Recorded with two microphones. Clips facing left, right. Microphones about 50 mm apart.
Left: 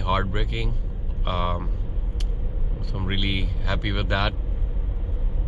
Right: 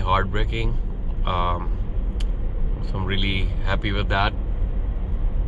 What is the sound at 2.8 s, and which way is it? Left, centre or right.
Speech, centre.